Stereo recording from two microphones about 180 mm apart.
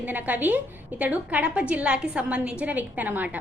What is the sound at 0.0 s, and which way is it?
A woman's voice, 10° right (ahead or behind).